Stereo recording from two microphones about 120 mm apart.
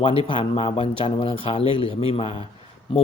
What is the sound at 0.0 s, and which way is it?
A man's voice, 50° left (ahead or behind).